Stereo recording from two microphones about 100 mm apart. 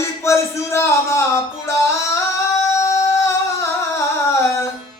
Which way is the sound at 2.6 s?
30° left (ahead or behind).